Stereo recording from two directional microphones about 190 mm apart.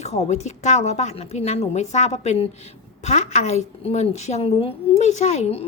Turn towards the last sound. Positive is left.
turn(degrees=35)  # may be behind; listen again after turning